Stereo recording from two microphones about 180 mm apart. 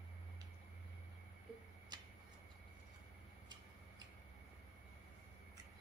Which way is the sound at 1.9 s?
25° right (ahead or behind).